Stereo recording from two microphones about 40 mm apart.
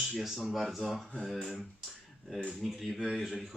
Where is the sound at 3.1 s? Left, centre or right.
Centre.